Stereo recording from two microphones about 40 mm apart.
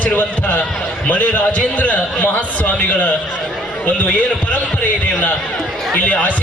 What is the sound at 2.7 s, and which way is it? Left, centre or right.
Speech, left.